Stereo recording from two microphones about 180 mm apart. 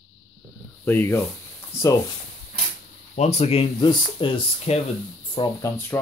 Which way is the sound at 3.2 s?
35° left (ahead or behind).